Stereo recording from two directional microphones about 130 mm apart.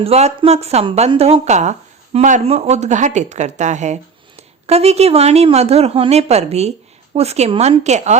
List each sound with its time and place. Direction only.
0.0 s a woman's voice: 55° right (ahead or behind)
4.6 s a woman's voice: 55° right (ahead or behind)
7.9 s speech: 60° right (ahead or behind)